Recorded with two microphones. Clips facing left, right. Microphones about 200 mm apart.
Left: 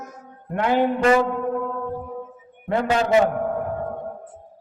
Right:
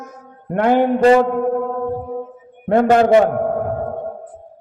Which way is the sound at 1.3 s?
50° right (ahead or behind).